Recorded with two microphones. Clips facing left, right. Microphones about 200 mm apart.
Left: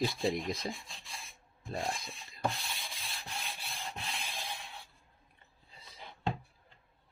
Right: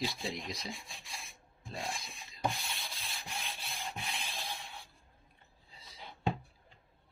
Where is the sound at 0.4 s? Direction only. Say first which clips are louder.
Left 5 dB; 55° left (ahead or behind).